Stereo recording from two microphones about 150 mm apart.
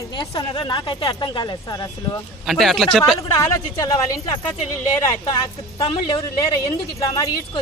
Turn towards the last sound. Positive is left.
turn(degrees=20)  # may be behind; listen again after turning